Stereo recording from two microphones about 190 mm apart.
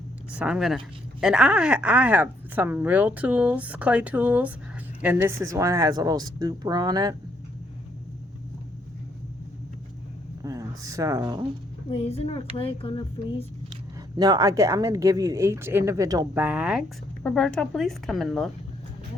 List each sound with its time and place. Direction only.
0.3 s a woman's voice: 5° right (ahead or behind); by 7.2 s 20° right (ahead or behind)
10.4 s speech: 20° right (ahead or behind)
11.9 s speech: 30° left (ahead or behind)
14.2 s a woman's voice: 20° right (ahead or behind); by 18.5 s centre (ahead or behind)